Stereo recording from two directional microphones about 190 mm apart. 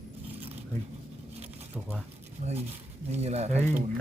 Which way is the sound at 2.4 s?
40° right (ahead or behind).